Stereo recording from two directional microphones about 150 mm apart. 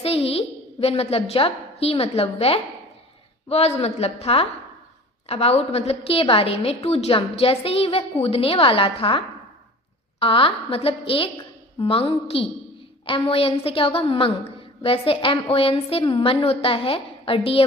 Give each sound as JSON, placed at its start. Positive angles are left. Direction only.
{"t": 0.0, "sound": "a woman's voice", "side_deg": 40}
{"t": 3.8, "sound": "a woman's voice", "side_deg": 45}